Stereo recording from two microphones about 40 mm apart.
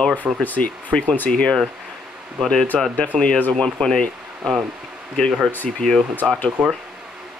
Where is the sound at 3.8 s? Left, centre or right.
Left.